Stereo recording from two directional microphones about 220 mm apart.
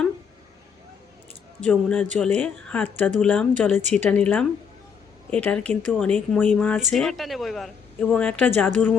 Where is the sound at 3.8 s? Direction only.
30° right (ahead or behind).